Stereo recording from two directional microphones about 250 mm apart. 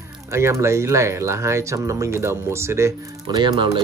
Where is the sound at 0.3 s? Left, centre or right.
Centre.